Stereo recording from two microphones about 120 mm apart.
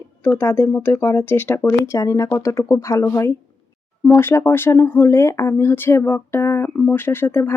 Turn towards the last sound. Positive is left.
turn(degrees=20)  # may be behind; listen again after turning